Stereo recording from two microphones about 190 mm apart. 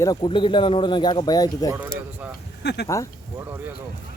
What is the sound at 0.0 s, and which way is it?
Speech, 20° left (ahead or behind).